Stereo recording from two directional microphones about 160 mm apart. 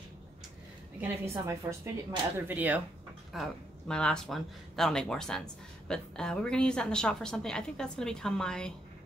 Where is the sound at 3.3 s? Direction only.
Centre (ahead or behind).